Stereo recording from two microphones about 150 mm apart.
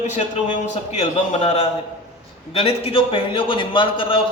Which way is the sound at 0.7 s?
45° left (ahead or behind).